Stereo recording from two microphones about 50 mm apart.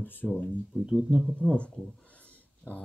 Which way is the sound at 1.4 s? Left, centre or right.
Centre.